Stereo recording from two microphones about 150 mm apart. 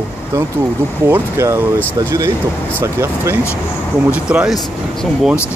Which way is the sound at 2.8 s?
15° right (ahead or behind).